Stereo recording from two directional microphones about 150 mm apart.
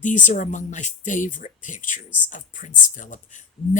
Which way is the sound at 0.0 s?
55° left (ahead or behind).